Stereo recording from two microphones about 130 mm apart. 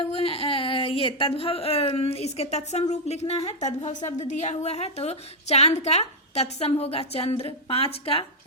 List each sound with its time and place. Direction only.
0.1 s a woman's voice: 45° left (ahead or behind)